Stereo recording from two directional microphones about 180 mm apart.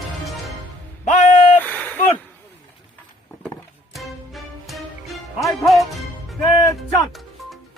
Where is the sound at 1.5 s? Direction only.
10° left (ahead or behind).